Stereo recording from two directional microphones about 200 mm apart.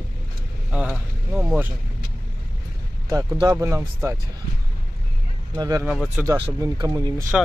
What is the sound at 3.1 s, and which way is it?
Speech, 15° right (ahead or behind).